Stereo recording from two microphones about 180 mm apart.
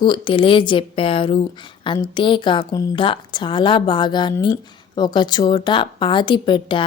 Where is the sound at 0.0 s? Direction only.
25° left (ahead or behind).